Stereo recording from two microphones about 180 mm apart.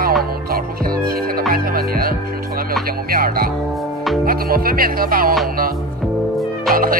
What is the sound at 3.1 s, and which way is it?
Speech, 55° right (ahead or behind).